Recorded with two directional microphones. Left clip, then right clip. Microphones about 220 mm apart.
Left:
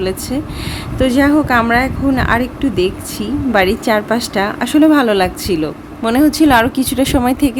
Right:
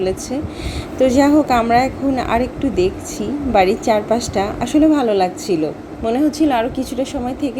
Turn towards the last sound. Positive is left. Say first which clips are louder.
# left 9 dB
turn(degrees=65)  # may be behind; listen again after turning